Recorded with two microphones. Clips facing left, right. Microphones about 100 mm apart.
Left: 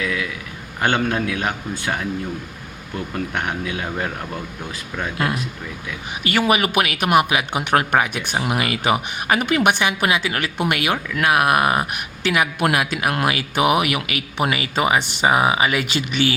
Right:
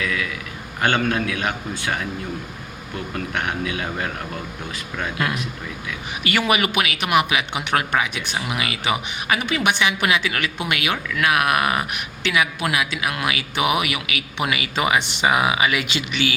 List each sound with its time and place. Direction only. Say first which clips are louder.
0.8 s a man's voice: left 1 dB; 25° left (ahead or behind)
3.3 s a man's voice: right 2 dB; 25° left (ahead or behind)
5.1 s speech: left 2 dB; 30° left (ahead or behind)
6.7 s a woman's voice: left 3 dB; 45° left (ahead or behind)
10.6 s a woman's voice: left 6 dB; 45° left (ahead or behind)